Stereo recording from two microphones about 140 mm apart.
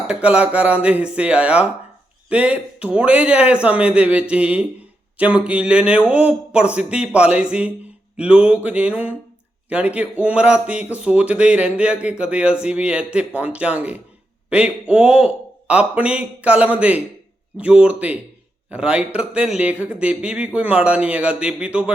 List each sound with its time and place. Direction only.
0.1 s speech: 10° right (ahead or behind)